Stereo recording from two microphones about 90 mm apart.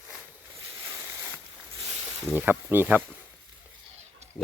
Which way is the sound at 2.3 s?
20° right (ahead or behind).